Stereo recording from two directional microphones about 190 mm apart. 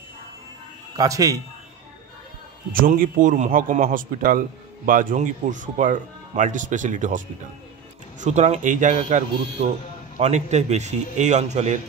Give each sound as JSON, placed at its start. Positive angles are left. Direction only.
{"t": 0.9, "sound": "a man's voice", "side_deg": -20}
{"t": 2.7, "sound": "a man's voice", "side_deg": -45}